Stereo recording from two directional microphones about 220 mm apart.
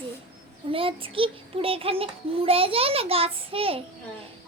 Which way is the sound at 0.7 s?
25° right (ahead or behind).